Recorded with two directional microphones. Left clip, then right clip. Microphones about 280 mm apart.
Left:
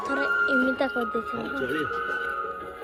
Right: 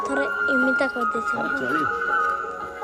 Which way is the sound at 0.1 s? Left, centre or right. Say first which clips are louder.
Left 1 dB; centre.